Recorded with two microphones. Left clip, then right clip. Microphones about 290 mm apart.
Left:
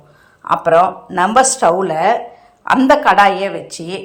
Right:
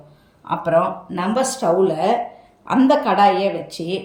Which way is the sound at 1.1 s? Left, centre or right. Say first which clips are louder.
Left 9 dB; centre.